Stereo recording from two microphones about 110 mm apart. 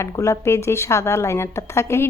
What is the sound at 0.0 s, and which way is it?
A woman's voice, 25° left (ahead or behind).